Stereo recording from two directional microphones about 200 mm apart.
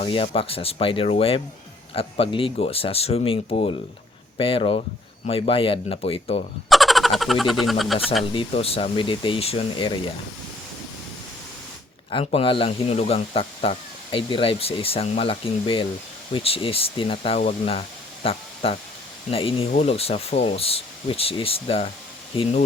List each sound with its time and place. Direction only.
0.0 s speech: 30° left (ahead or behind)
6.7 s a sound: centre (ahead or behind)
8.3 s speech: 25° left (ahead or behind)
12.1 s speech: 30° left (ahead or behind)